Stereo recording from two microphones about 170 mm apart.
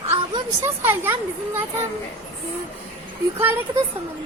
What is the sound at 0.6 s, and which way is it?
Speech, 15° right (ahead or behind).